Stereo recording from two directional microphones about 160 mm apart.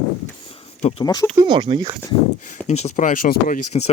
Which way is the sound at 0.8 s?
45° left (ahead or behind).